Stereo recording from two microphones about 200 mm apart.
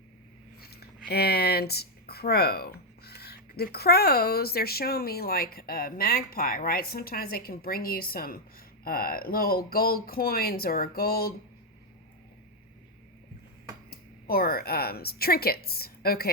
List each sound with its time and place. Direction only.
0.6 s a sound: 50° left (ahead or behind)
1.0 s speech: 50° left (ahead or behind)
13.9 s a woman's voice: 50° left (ahead or behind)